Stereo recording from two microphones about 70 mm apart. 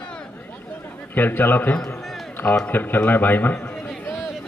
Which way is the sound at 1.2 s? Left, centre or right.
Left.